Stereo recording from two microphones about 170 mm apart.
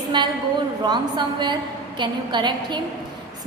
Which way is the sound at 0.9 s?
25° right (ahead or behind).